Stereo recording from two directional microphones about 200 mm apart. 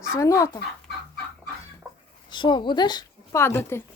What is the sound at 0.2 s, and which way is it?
Speech, 15° left (ahead or behind).